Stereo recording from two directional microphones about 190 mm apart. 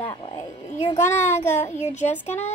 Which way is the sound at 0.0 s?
25° left (ahead or behind).